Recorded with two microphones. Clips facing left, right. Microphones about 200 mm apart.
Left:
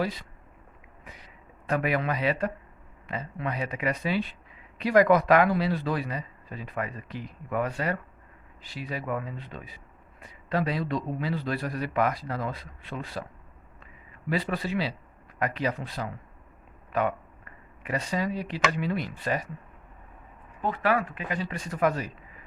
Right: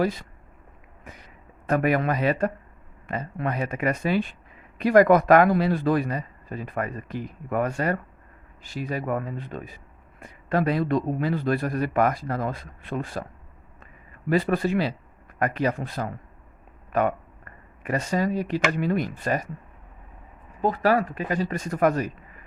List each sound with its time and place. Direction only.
0.0 s speech: 45° right (ahead or behind)
1.0 s a sound: 50° right (ahead or behind)
3.1 s speech: 50° right (ahead or behind)
14.3 s speech: 50° right (ahead or behind)
20.6 s speech: 40° right (ahead or behind)